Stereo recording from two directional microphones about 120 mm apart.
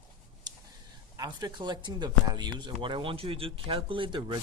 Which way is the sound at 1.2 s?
35° right (ahead or behind).